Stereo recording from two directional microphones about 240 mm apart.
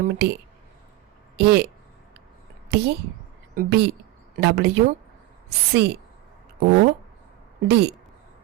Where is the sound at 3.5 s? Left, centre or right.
Right.